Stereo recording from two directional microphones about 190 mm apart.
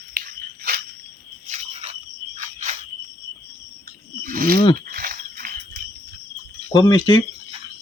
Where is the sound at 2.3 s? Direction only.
40° right (ahead or behind).